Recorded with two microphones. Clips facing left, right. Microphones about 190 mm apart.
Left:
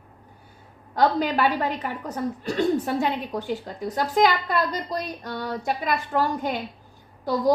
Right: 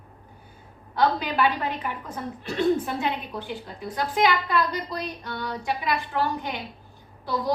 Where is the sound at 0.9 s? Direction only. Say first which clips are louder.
Left 2 dB; 45° left (ahead or behind).